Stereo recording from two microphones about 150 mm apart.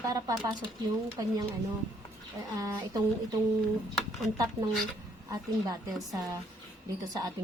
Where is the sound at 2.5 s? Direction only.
25° right (ahead or behind).